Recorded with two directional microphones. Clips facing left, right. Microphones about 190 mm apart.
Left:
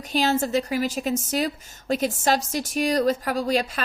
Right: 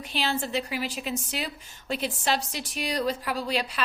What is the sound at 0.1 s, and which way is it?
Speech, 45° left (ahead or behind).